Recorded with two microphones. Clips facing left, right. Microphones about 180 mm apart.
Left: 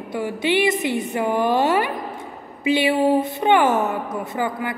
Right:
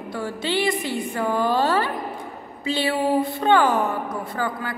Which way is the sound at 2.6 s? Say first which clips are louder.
Left 5 dB; 15° left (ahead or behind).